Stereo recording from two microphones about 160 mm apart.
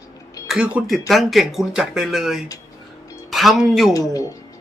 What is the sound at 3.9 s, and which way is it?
Speech, 20° left (ahead or behind).